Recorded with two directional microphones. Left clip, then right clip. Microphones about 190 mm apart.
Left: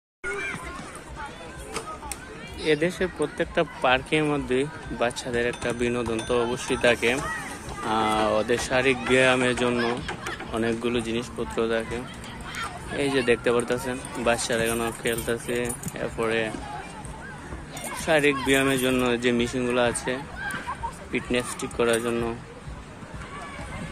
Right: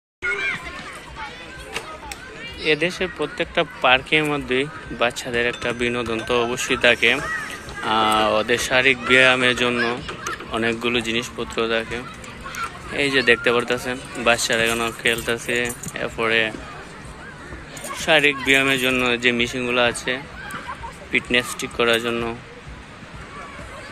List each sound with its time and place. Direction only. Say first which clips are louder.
0.3 s hubbub: right 7 dB; 50° left (ahead or behind)
2.6 s speech: right 3 dB; 5° left (ahead or behind)
18.0 s speech: right 5 dB; 5° left (ahead or behind)